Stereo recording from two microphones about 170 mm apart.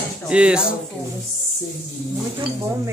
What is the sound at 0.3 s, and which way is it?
Speech, 5° right (ahead or behind).